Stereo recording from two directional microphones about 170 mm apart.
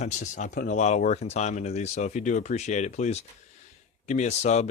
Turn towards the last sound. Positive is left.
turn(degrees=40)  # may be behind; listen again after turning